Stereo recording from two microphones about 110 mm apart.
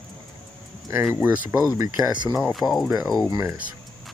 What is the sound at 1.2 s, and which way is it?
Speech, 15° right (ahead or behind).